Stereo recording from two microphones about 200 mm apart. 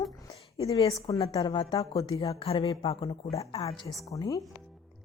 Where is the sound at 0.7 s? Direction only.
30° left (ahead or behind).